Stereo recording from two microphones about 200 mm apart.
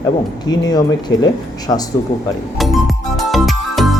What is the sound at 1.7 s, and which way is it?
Speech, 20° left (ahead or behind).